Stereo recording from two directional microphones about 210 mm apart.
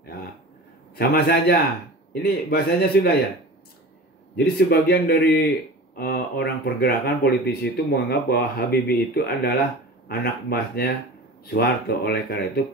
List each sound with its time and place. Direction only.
0.9 s speech: 50° left (ahead or behind)
4.6 s speech: 50° left (ahead or behind)